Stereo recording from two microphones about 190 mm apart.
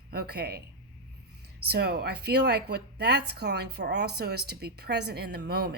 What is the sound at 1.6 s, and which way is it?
A woman's voice, 60° right (ahead or behind).